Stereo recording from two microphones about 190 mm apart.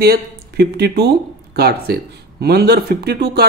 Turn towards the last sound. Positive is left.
turn(degrees=-55)  # may be behind; listen again after turning